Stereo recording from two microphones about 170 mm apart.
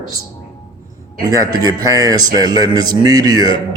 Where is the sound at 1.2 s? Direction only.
20° right (ahead or behind).